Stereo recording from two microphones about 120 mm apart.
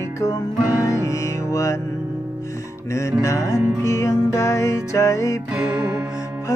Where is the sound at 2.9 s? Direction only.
25° left (ahead or behind).